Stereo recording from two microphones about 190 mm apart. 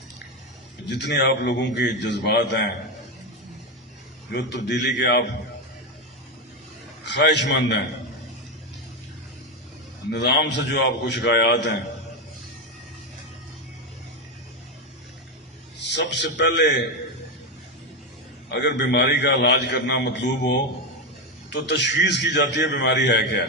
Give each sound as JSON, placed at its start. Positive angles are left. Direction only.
{"t": 0.9, "sound": "a man's voice", "side_deg": 65}
{"t": 4.3, "sound": "a man's voice", "side_deg": 65}
{"t": 7.0, "sound": "a man's voice", "side_deg": 65}
{"t": 10.1, "sound": "a man's voice", "side_deg": 65}
{"t": 15.9, "sound": "a man's voice", "side_deg": 65}
{"t": 18.4, "sound": "a man's voice", "side_deg": 65}